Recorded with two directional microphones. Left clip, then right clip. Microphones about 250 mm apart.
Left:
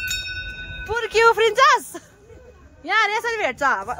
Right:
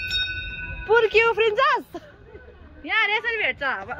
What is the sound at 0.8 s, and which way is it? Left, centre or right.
Music, centre.